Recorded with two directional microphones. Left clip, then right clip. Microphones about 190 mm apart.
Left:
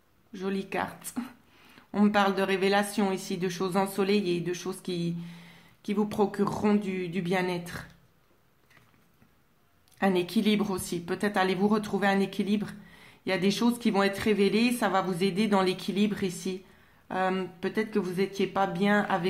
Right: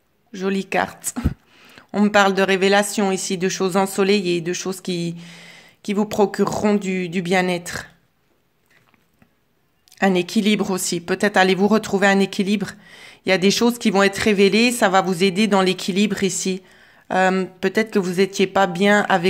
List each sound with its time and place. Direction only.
0.3 s a woman's voice: 40° right (ahead or behind)
9.8 s a woman's voice: 40° right (ahead or behind)